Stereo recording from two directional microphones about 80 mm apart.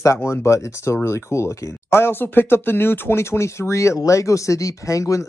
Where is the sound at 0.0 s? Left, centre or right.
Left.